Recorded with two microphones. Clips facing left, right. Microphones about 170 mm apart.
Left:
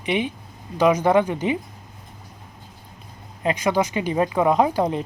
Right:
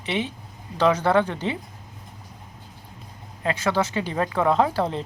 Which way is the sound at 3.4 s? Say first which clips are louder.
Left 3 dB; 15° left (ahead or behind).